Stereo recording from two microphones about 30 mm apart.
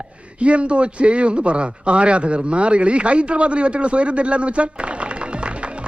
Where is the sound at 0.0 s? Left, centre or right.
Right.